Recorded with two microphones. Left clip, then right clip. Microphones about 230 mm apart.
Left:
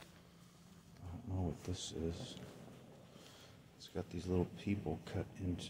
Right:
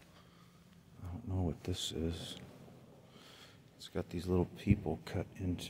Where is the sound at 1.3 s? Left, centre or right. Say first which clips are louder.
Right 4 dB; right.